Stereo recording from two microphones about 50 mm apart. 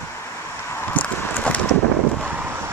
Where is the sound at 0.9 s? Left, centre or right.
Left.